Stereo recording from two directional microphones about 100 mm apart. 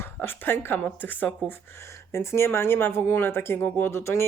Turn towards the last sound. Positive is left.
turn(degrees=25)  # may be behind; listen again after turning